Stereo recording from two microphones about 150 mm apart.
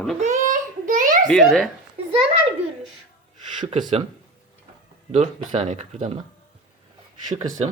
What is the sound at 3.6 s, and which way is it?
Speech, 50° right (ahead or behind).